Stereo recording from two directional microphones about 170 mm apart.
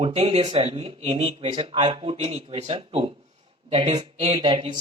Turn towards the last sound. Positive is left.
turn(degrees=-30)  # may be behind; listen again after turning